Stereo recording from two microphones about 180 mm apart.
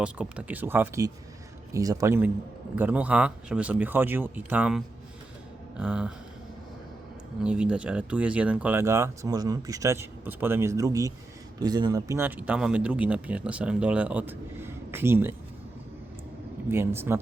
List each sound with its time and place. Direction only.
0.0 s speech: 5° right (ahead or behind)
7.4 s speech: 5° right (ahead or behind)
16.6 s speech: 15° right (ahead or behind)